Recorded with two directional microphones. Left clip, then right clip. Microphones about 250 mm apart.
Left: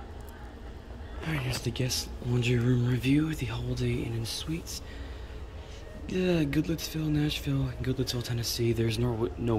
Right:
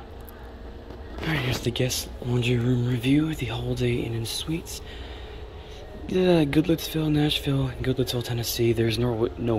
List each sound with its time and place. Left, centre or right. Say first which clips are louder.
1.6 s speech: right 6 dB; centre
6.0 s speech: right 7 dB; centre